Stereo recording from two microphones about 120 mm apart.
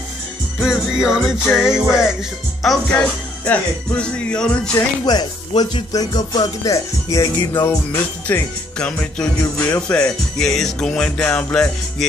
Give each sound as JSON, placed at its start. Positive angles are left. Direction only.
{"t": 0.6, "sound": "music", "side_deg": -5}
{"t": 2.6, "sound": "speech", "side_deg": 5}
{"t": 5.0, "sound": "speech", "side_deg": 35}
{"t": 7.6, "sound": "music", "side_deg": 20}
{"t": 8.7, "sound": "speech", "side_deg": 10}